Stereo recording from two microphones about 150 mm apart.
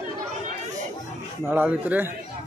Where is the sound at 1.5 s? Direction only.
10° right (ahead or behind).